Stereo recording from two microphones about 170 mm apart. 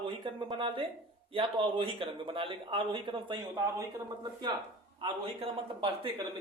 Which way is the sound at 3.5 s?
15° right (ahead or behind).